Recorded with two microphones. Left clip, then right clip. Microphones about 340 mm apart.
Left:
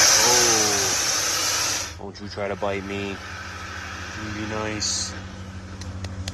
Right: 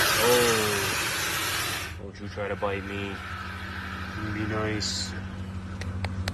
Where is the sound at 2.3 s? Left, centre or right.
Centre.